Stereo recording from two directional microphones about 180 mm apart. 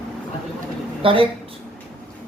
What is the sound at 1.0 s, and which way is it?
Speech, 30° right (ahead or behind).